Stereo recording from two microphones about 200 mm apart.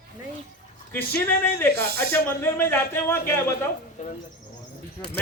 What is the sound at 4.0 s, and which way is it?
Speech, 35° left (ahead or behind).